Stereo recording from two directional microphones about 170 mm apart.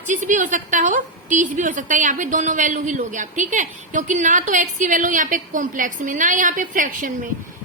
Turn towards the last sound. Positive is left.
turn(degrees=-50)  # may be behind; listen again after turning